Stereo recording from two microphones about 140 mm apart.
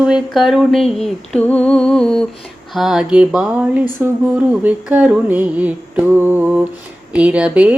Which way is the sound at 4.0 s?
10° right (ahead or behind).